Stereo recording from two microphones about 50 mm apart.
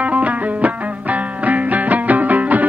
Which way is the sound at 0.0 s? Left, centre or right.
Right.